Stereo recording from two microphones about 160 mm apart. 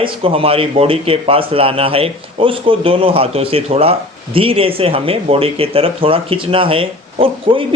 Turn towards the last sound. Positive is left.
turn(degrees=-35)  # may be behind; listen again after turning